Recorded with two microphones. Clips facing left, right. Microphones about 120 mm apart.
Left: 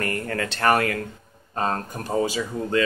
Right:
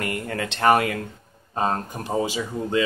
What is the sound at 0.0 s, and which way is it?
Speech, 15° right (ahead or behind).